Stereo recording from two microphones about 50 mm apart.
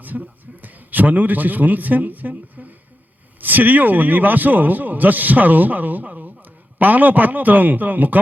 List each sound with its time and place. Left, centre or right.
0.1 s speech: right
0.6 s a man's voice: right